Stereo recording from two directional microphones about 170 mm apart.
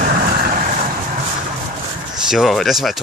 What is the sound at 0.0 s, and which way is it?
Vehicle, 50° right (ahead or behind).